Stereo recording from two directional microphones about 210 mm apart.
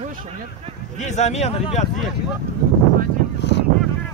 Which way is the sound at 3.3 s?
55° left (ahead or behind).